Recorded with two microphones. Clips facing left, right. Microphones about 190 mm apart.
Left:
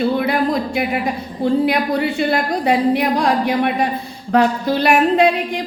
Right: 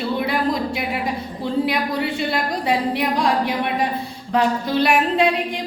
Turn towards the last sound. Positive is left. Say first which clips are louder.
# left 4 dB
turn(degrees=45)  # may be behind; listen again after turning